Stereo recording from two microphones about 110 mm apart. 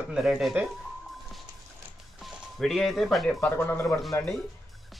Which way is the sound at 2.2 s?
Centre (ahead or behind).